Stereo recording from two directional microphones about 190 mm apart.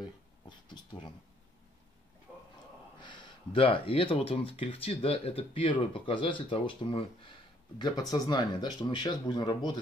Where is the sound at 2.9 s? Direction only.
25° left (ahead or behind).